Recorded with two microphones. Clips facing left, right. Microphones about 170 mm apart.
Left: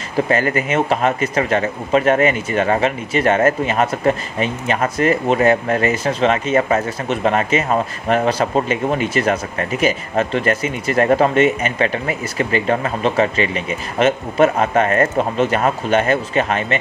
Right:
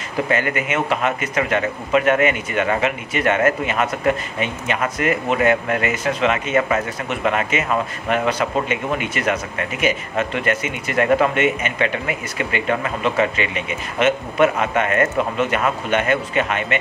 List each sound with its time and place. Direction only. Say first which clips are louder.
0.3 s speech: left 3 dB; 35° left (ahead or behind)